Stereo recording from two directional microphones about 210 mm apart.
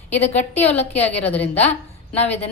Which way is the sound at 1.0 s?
30° left (ahead or behind).